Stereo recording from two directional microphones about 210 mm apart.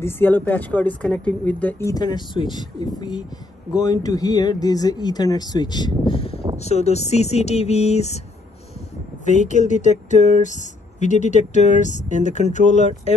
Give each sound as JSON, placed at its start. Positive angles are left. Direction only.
{"t": 0.0, "sound": "speech", "side_deg": 10}
{"t": 9.2, "sound": "speech", "side_deg": 35}